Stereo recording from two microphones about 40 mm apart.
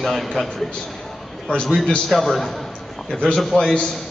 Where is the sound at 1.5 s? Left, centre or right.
Left.